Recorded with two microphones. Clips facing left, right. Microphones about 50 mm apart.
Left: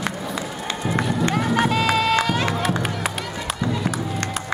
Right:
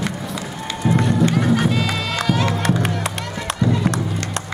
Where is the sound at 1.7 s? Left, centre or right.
Centre.